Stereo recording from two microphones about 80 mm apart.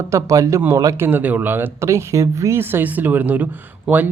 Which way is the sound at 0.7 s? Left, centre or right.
Right.